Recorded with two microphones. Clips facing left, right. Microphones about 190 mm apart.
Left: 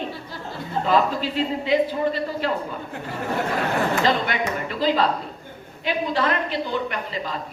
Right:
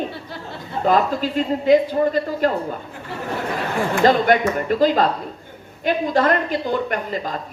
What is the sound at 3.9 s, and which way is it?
A woman's voice, 45° right (ahead or behind).